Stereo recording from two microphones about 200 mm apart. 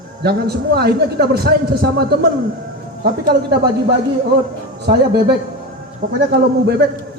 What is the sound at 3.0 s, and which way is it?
Speech, 50° right (ahead or behind).